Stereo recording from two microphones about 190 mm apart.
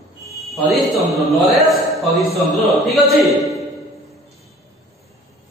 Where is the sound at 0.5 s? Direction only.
Centre (ahead or behind).